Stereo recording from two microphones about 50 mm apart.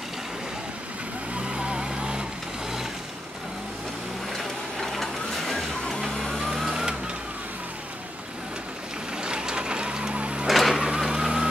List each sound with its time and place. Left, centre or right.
1.5 s vehicle: centre
4.3 s vehicle: centre
9.2 s vehicle: centre
10.4 s vehicle: centre